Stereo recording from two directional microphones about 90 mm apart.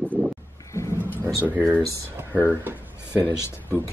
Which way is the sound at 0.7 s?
30° left (ahead or behind).